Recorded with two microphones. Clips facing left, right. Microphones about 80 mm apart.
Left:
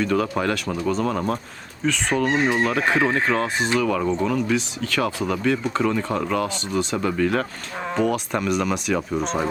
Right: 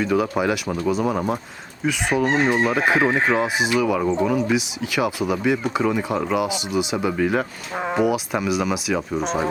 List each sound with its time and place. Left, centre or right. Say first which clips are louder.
0.0 s speech: right 1 dB; centre
2.2 s speech: right 1 dB; right
2.5 s speech: right 2 dB; centre